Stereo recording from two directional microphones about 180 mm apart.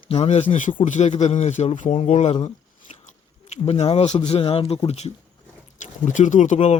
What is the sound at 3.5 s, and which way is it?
Speech, 35° left (ahead or behind).